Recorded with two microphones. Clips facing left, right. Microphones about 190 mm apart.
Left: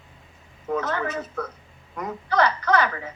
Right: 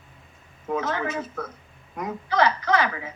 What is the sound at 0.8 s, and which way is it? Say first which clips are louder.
A woman's voice: even; 50° left (ahead or behind).